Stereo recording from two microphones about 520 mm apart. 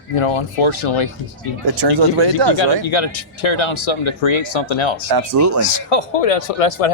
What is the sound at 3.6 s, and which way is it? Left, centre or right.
Speech, left.